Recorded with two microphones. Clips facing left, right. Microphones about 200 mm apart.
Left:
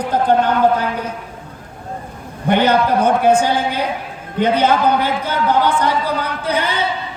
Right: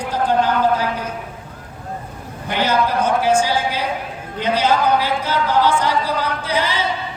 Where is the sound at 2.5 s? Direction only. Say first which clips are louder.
Left 5 dB; 60° left (ahead or behind).